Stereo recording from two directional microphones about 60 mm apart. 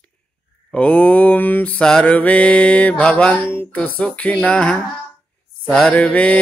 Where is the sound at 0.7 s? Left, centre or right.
Left.